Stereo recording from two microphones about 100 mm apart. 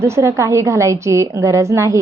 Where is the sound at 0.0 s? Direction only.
30° right (ahead or behind).